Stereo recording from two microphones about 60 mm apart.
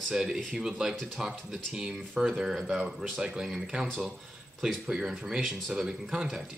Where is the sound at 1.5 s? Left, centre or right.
Centre.